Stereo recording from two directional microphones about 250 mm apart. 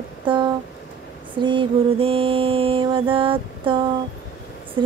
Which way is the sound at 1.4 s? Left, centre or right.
Centre.